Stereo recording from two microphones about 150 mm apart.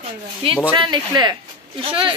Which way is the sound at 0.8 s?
30° right (ahead or behind).